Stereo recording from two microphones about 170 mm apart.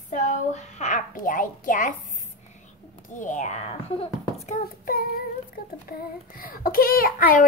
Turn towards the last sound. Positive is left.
turn(degrees=55)  # may be behind; listen again after turning